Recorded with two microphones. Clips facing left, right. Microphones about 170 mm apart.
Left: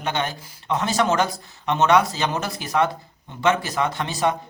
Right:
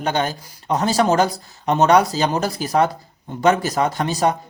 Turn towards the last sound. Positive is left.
turn(degrees=-40)  # may be behind; listen again after turning